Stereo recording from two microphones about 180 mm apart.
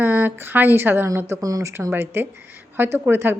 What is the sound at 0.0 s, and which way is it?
A woman's voice, 10° right (ahead or behind).